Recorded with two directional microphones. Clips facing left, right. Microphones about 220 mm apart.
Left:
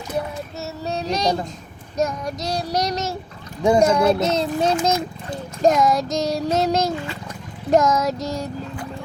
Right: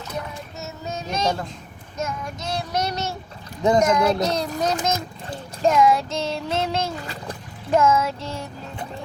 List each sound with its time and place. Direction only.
0.6 s child singing: 35° left (ahead or behind)
4.2 s a child's voice: 25° left (ahead or behind)
5.6 s child singing: 40° left (ahead or behind)
6.9 s a sound: 40° right (ahead or behind)
7.7 s child singing: 40° left (ahead or behind)